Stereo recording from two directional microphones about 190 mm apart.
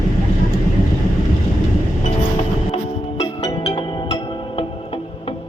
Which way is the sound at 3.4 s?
30° left (ahead or behind).